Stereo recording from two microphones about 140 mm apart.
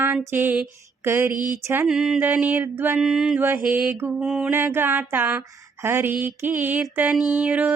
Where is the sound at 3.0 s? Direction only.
5° right (ahead or behind).